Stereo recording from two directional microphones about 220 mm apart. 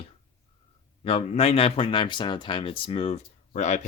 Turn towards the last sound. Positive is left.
turn(degrees=35)  # may be behind; listen again after turning